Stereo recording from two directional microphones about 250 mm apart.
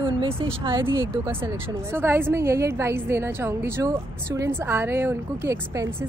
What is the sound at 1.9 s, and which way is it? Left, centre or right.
A woman's voice, centre.